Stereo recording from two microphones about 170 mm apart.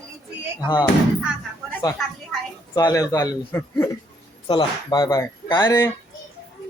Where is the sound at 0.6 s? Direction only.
25° left (ahead or behind).